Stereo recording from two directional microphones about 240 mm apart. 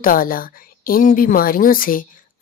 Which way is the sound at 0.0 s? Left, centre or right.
Left.